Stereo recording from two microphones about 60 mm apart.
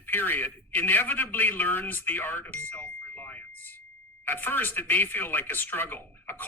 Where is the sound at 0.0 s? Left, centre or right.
Left.